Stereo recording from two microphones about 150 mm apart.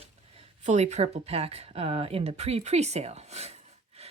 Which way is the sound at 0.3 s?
50° right (ahead or behind).